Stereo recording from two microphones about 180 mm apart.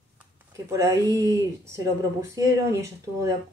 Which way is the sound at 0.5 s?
15° right (ahead or behind).